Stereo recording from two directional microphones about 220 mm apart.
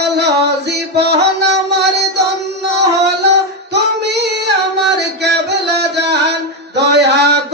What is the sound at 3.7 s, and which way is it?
Child singing, 50° right (ahead or behind).